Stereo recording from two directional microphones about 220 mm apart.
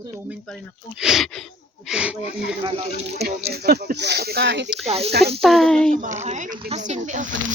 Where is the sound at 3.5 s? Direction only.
45° right (ahead or behind).